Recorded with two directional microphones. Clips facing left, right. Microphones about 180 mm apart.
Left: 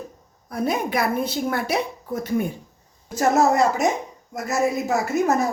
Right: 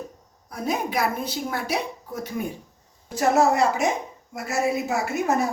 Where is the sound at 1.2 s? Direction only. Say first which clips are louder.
Left 4 dB; 55° left (ahead or behind).